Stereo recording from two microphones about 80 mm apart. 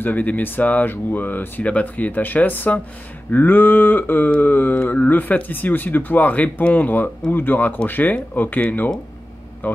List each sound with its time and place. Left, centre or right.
0.0 s mantra: left